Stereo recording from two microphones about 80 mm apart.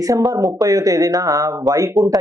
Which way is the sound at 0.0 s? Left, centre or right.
Right.